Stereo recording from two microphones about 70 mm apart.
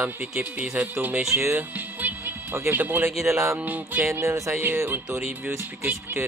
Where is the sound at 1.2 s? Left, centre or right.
Right.